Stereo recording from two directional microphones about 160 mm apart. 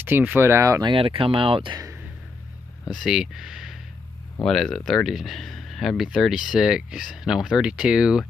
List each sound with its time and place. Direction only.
0.0 s speech: 10° right (ahead or behind)
0.9 s speech: 35° right (ahead or behind)
2.8 s speech: centre (ahead or behind)